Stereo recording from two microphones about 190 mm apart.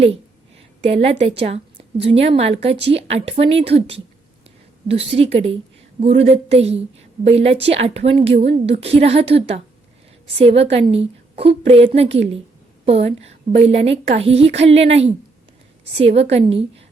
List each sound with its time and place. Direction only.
0.9 s a woman's voice: 35° right (ahead or behind)